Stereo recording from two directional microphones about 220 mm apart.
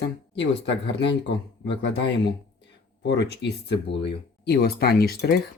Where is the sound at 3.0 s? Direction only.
50° left (ahead or behind).